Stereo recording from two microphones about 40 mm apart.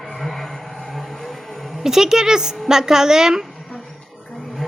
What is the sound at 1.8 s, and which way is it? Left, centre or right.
Speech, centre.